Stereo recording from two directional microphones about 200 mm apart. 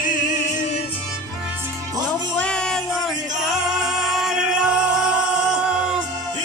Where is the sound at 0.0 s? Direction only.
40° left (ahead or behind).